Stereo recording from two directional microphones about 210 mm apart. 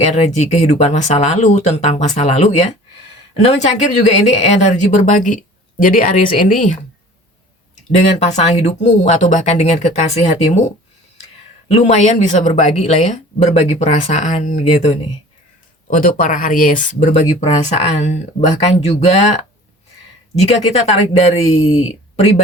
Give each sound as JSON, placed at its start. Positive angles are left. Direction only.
{"t": 0.0, "sound": "speech", "side_deg": 30}
{"t": 3.7, "sound": "speech", "side_deg": 30}
{"t": 7.9, "sound": "speech", "side_deg": 30}
{"t": 11.7, "sound": "speech", "side_deg": 30}
{"t": 20.8, "sound": "speech", "side_deg": 30}